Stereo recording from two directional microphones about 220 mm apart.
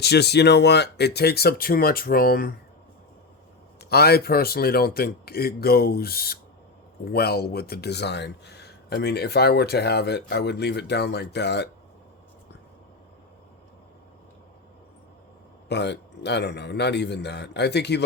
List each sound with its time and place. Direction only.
0.0 s speech: 50° left (ahead or behind)
3.8 s speech: 45° left (ahead or behind)
15.7 s speech: 50° left (ahead or behind)